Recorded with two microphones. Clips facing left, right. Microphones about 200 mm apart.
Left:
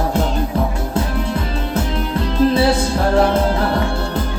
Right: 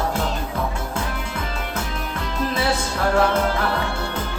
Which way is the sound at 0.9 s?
35° left (ahead or behind).